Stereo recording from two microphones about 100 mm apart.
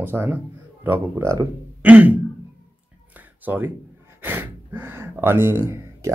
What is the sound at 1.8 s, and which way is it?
Throat clearing, 15° right (ahead or behind).